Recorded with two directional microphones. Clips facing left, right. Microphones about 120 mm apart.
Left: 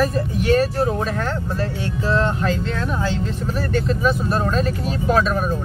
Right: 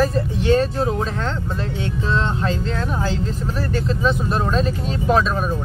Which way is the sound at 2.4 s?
30° right (ahead or behind).